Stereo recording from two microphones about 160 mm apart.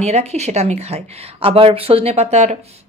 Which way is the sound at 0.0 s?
45° right (ahead or behind).